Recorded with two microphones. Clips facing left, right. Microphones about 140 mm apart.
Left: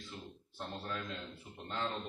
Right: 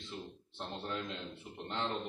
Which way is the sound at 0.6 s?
25° right (ahead or behind).